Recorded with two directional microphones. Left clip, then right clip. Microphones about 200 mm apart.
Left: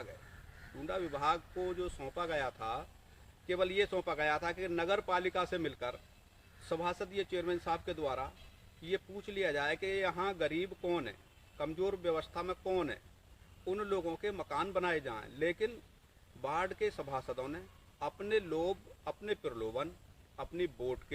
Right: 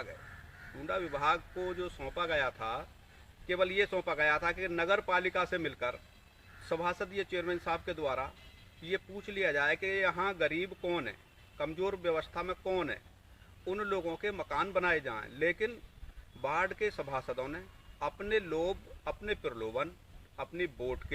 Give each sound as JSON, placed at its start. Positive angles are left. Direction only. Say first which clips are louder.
{"t": 0.9, "sound": "speech", "louder": "right 3 dB", "side_deg": 15}